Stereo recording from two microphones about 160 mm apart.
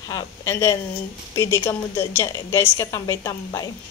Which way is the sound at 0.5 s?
15° left (ahead or behind).